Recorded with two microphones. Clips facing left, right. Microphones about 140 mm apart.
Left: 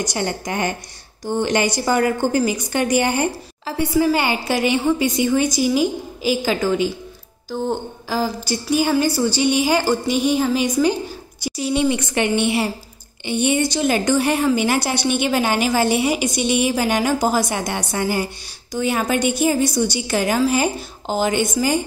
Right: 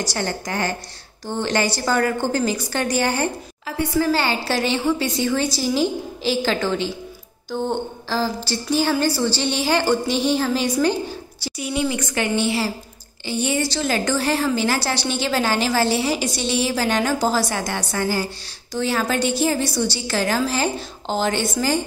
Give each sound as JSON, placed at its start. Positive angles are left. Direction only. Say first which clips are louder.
{"t": 0.0, "sound": "a woman's voice", "louder": "left 2 dB", "side_deg": 20}
{"t": 3.9, "sound": "a woman's voice", "louder": "left 2 dB", "side_deg": 15}
{"t": 11.5, "sound": "a woman's voice", "louder": "left 4 dB", "side_deg": 25}